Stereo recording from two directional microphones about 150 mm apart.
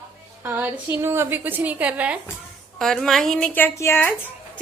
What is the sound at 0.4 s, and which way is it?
A woman's voice, 15° right (ahead or behind).